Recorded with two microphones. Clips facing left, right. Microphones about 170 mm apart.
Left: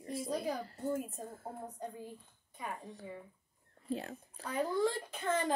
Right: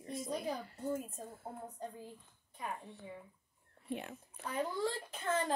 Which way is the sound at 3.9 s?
35° left (ahead or behind).